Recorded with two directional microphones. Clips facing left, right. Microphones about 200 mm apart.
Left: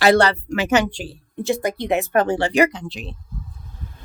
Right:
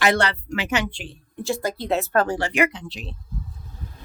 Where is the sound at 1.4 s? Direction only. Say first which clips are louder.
Left 3 dB; 20° left (ahead or behind); by 3.1 s 45° left (ahead or behind).